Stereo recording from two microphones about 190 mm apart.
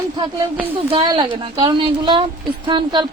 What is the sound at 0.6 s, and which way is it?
A woman's voice, 30° right (ahead or behind).